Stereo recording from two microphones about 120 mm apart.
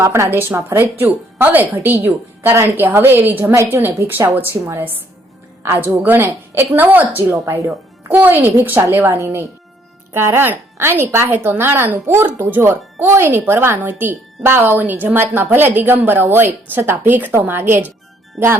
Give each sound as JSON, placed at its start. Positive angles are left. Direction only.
{"t": 0.0, "sound": "a woman's voice", "side_deg": -25}
{"t": 4.3, "sound": "speech", "side_deg": -15}
{"t": 7.3, "sound": "a woman's voice", "side_deg": -25}